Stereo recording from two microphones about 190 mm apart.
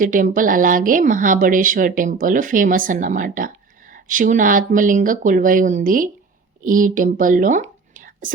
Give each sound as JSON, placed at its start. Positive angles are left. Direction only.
{"t": 0.0, "sound": "speech", "side_deg": -45}